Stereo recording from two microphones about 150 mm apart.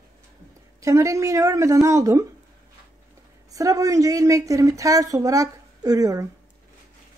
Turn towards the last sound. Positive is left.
turn(degrees=-25)  # may be behind; listen again after turning